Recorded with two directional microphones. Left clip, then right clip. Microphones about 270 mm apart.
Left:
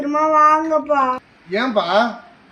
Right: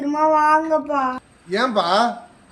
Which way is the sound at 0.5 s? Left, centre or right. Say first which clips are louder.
Left 2 dB; centre.